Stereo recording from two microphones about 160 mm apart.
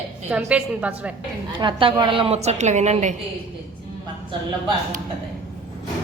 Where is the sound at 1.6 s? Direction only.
30° right (ahead or behind).